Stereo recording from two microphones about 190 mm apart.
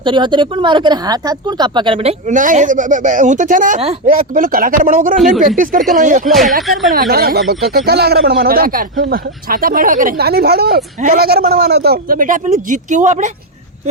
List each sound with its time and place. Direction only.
0.0 s a man's voice: 25° right (ahead or behind); by 6.2 s 40° right (ahead or behind)
6.2 s speech: centre (ahead or behind)
6.9 s a man's voice: 50° right (ahead or behind)